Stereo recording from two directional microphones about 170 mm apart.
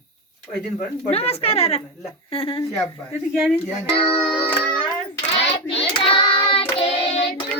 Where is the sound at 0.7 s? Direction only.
35° left (ahead or behind).